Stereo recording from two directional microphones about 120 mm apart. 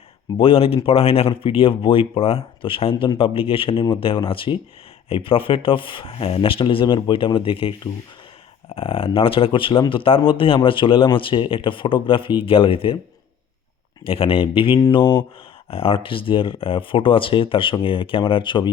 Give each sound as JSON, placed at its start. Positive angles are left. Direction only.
{"t": 0.3, "sound": "speech", "side_deg": 50}
{"t": 8.7, "sound": "speech", "side_deg": 50}
{"t": 14.0, "sound": "speech", "side_deg": 50}